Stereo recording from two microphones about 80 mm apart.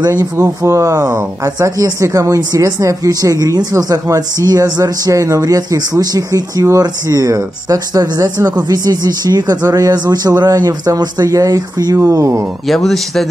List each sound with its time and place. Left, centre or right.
0.2 s speech: right
12.6 s speech: centre